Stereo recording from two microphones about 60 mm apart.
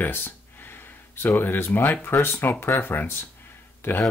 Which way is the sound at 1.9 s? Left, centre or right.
Left.